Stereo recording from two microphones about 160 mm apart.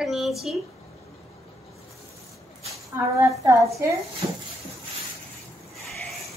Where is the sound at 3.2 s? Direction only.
20° right (ahead or behind).